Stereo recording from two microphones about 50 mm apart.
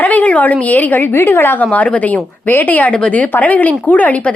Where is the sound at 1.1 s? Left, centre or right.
Left.